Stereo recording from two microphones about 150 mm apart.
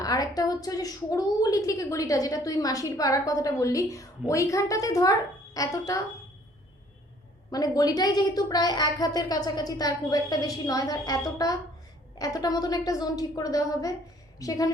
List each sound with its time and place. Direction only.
0.0 s a woman's voice: 25° left (ahead or behind)
7.5 s a woman's voice: 25° left (ahead or behind)